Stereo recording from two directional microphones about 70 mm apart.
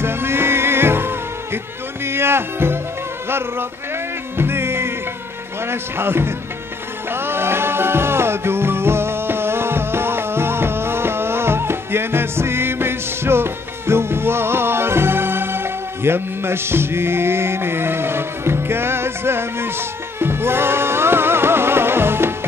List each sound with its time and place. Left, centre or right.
0.0 s music: right
3.3 s a sound: right
4.4 s music: right
5.7 s speech: right
7.1 s music: right